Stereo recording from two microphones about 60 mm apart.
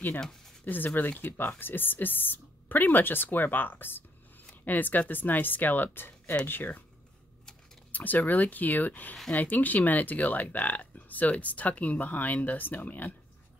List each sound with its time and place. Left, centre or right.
0.7 s speech: left
7.9 s speech: left